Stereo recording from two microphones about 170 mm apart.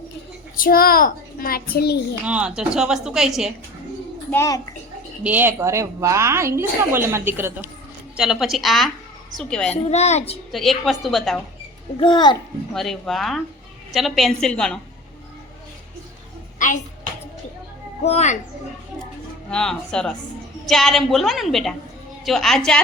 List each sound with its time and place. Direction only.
0.5 s a child's voice: 55° left (ahead or behind)
2.2 s speech: 5° right (ahead or behind)
4.3 s a child's voice: 15° left (ahead or behind)
5.2 s a woman's voice: 10° right (ahead or behind)
9.7 s a woman's voice: 40° left (ahead or behind)
10.5 s speech: centre (ahead or behind)
11.9 s a child's voice: 30° left (ahead or behind)
12.7 s speech: centre (ahead or behind)
16.6 s a child's voice: 50° left (ahead or behind)
18.0 s a woman's voice: 40° left (ahead or behind)
19.5 s speech: 5° left (ahead or behind)